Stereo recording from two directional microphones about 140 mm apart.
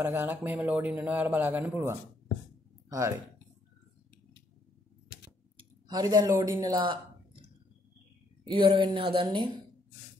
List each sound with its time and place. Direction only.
0.0 s a man's voice: 15° right (ahead or behind)
5.9 s a man's voice: 30° right (ahead or behind)
8.5 s speech: 40° right (ahead or behind)